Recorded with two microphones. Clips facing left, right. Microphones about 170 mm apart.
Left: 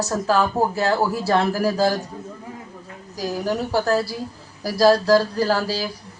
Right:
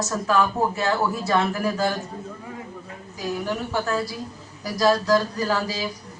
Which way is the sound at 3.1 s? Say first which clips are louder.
Left 3 dB; 35° left (ahead or behind).